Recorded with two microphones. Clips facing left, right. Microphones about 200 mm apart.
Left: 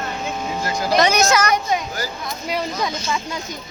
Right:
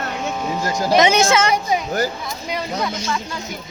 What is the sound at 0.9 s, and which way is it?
Speech, 25° right (ahead or behind).